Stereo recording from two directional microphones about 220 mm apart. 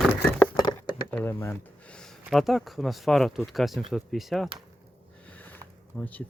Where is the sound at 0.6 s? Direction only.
20° left (ahead or behind).